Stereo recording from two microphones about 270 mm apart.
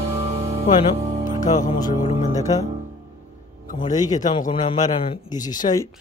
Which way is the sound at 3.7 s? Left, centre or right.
Left.